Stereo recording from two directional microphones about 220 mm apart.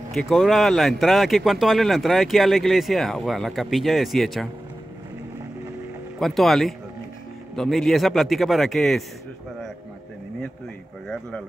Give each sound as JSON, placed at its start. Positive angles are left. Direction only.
{"t": 0.1, "sound": "speech", "side_deg": 0}
{"t": 6.1, "sound": "speech", "side_deg": 0}